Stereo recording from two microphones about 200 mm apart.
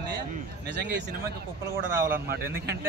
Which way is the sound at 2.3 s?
55° right (ahead or behind).